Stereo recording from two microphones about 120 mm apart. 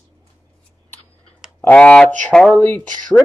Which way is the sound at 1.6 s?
10° left (ahead or behind).